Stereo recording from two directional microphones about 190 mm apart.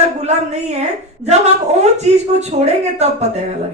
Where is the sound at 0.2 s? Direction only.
35° right (ahead or behind).